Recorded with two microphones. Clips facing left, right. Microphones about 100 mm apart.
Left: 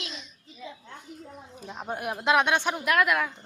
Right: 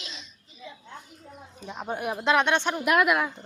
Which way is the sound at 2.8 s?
15° right (ahead or behind).